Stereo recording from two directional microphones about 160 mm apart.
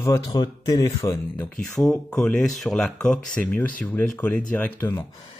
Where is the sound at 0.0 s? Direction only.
20° left (ahead or behind).